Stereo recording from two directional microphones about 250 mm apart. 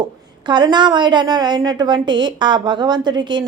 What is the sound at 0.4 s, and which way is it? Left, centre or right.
A woman's voice, centre.